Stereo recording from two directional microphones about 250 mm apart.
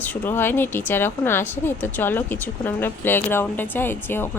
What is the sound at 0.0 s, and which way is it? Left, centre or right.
Speech, centre.